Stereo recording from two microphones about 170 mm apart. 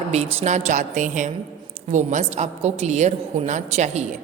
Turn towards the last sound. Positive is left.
turn(degrees=-40)  # may be behind; listen again after turning